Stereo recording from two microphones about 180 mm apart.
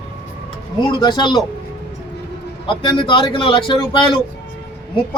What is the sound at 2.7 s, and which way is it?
A man's voice, 25° left (ahead or behind).